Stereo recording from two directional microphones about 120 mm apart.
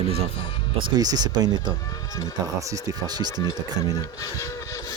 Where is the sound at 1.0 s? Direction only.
35° right (ahead or behind).